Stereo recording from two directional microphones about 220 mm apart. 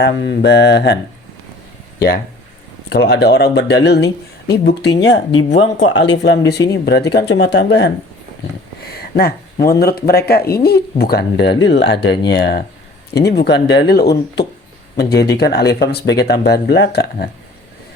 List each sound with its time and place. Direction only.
0.0 s speech: 55° left (ahead or behind)
2.0 s speech: 45° left (ahead or behind)
5.3 s speech: 25° left (ahead or behind)
5.5 s speech: 60° left (ahead or behind)